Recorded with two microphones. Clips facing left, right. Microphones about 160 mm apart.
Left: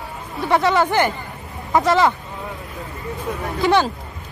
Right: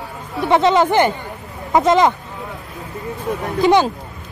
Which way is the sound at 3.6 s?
15° right (ahead or behind).